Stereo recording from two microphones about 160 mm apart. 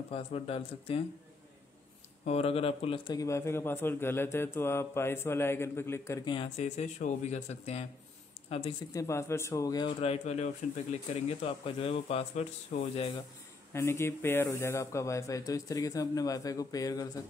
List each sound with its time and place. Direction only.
0.1 s speech: 35° left (ahead or behind)
2.2 s speech: 40° left (ahead or behind)
3.2 s a man's voice: 20° left (ahead or behind)
6.3 s speech: 40° left (ahead or behind)
8.9 s speech: 15° left (ahead or behind)
9.9 s speech: 40° left (ahead or behind)
13.7 s speech: 15° left (ahead or behind)